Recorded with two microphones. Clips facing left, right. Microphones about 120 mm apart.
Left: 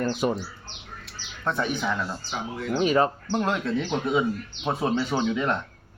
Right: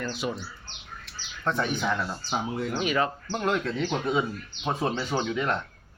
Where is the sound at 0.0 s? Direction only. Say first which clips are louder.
Left 6 dB; 50° left (ahead or behind).